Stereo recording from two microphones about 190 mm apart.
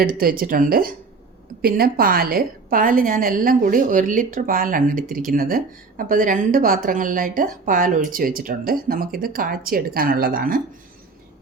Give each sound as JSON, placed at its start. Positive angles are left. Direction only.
{"t": 0.0, "sound": "a woman's voice", "side_deg": -50}